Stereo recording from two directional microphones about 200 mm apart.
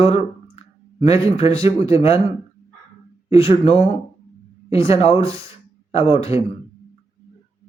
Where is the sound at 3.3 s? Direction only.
30° left (ahead or behind).